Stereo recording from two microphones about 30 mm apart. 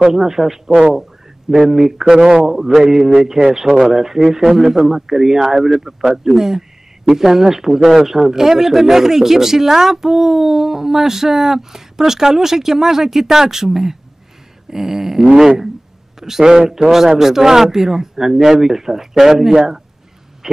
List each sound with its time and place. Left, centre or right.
0.0 s a man's voice: centre
1.7 s a man's voice: centre